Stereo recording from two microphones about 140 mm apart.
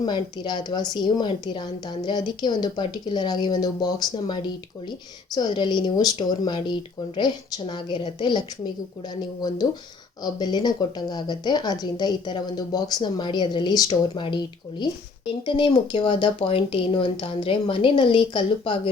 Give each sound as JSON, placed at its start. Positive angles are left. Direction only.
{"t": 0.0, "sound": "speech", "side_deg": 30}